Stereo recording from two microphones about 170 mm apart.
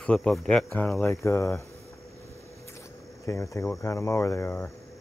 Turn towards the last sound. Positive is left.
turn(degrees=15)  # may be behind; listen again after turning